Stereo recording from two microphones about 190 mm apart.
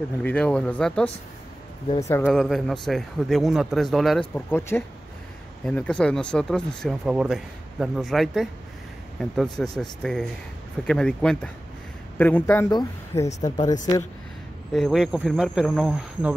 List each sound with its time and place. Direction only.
0.2 s speech: 5° left (ahead or behind)
2.2 s speech: centre (ahead or behind)
4.5 s speech: 10° left (ahead or behind)
14.7 s speech: centre (ahead or behind)